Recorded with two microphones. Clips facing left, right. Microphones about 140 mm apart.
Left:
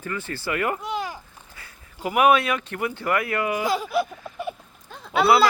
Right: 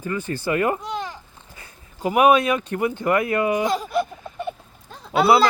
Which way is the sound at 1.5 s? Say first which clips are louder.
Right 2 dB; 20° right (ahead or behind).